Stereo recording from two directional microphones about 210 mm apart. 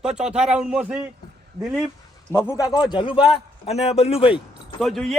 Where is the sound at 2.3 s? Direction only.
15° left (ahead or behind).